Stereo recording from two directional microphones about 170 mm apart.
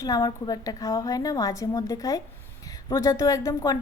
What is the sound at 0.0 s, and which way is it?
A woman's voice, 20° left (ahead or behind).